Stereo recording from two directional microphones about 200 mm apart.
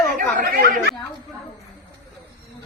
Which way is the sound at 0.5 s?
55° right (ahead or behind).